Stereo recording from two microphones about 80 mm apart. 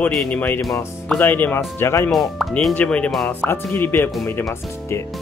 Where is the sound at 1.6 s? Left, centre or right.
Left.